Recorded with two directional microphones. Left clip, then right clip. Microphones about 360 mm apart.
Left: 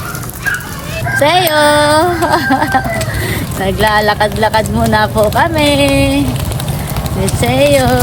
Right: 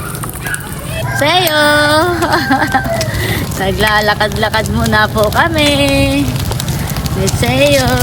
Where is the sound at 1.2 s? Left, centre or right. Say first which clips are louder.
Left 1 dB; centre.